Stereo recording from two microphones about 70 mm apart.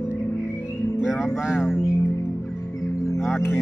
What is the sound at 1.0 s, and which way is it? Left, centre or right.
Music, centre.